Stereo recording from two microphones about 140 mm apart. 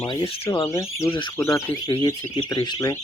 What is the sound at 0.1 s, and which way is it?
Speech, 25° left (ahead or behind).